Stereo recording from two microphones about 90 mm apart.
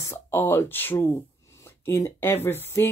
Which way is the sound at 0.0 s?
30° left (ahead or behind).